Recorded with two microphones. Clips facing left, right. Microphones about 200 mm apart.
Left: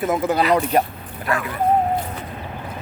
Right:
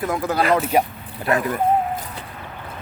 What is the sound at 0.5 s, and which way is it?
Speech, 5° right (ahead or behind).